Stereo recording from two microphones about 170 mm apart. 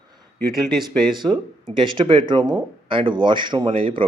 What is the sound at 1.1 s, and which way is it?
Speech, 25° right (ahead or behind).